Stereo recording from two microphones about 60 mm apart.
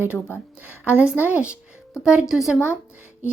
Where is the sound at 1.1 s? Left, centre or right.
Right.